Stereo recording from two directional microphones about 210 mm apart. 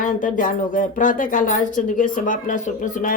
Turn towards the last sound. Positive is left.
turn(degrees=40)  # may be behind; listen again after turning